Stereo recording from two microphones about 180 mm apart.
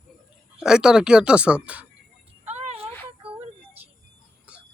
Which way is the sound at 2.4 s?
35° right (ahead or behind).